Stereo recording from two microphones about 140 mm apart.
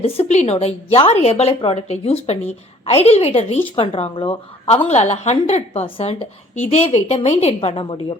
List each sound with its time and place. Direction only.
0.0 s a woman's voice: 50° left (ahead or behind)